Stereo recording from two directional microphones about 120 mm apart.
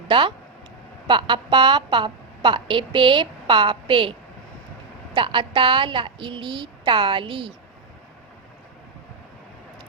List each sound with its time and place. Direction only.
0.1 s a woman's voice: 45° right (ahead or behind)
5.1 s a woman's voice: 45° right (ahead or behind)